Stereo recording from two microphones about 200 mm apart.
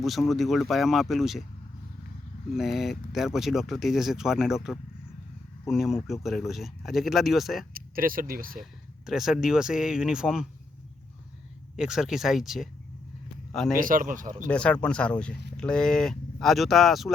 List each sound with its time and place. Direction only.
0.0 s speech: centre (ahead or behind)
2.6 s speech: centre (ahead or behind)
7.7 s speech: 45° right (ahead or behind)
9.0 s speech: centre (ahead or behind)
11.8 s speech: 5° right (ahead or behind)
13.7 s speech: 45° right (ahead or behind)
14.5 s speech: 5° left (ahead or behind)